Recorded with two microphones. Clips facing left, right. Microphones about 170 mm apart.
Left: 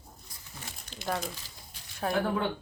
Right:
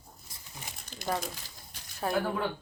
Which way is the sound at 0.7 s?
15° right (ahead or behind).